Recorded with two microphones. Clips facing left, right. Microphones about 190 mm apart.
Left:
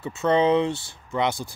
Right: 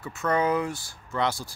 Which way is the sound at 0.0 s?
25° left (ahead or behind).